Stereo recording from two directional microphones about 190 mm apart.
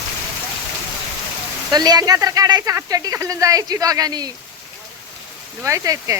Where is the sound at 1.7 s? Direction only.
20° right (ahead or behind).